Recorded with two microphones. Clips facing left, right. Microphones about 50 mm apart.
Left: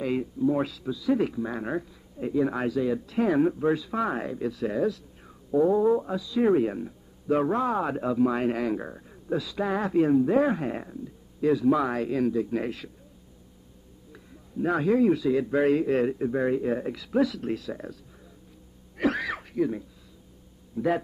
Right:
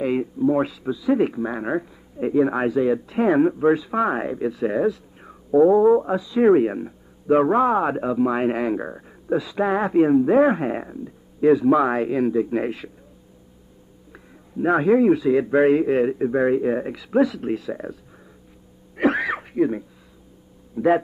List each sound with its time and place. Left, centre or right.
0.0 s speech: right
14.1 s speech: right
18.9 s throat clearing: right
20.7 s speech: right